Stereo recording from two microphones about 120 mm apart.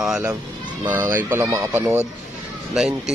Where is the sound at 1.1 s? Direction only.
20° right (ahead or behind).